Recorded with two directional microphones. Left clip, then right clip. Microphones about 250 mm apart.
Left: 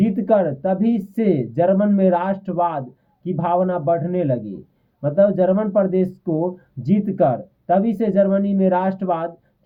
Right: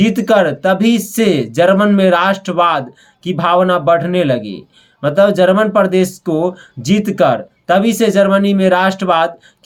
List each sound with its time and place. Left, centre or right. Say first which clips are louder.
0.2 s a man's voice: right 5 dB; centre
6.2 s speech: right 6 dB; right
6.8 s a man's voice: right 6 dB; centre